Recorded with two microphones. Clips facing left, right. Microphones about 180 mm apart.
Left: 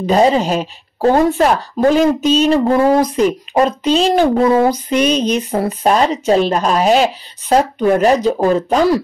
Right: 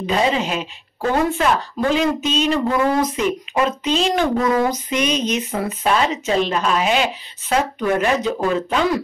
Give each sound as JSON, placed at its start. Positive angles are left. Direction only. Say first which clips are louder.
{"t": 0.0, "sound": "speech", "louder": "left 7 dB", "side_deg": 40}